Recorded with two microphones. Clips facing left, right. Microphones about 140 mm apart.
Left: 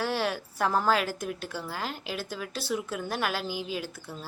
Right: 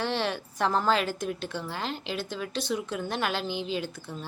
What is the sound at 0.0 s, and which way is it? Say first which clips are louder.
A woman's voice: even; 5° left (ahead or behind).